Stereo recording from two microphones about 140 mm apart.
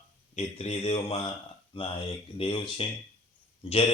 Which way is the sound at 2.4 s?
40° left (ahead or behind).